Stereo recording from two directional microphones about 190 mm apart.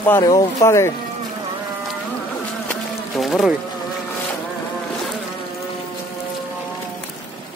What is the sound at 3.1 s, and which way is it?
Insect, centre (ahead or behind).